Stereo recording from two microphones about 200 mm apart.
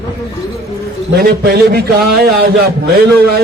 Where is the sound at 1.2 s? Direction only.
50° right (ahead or behind).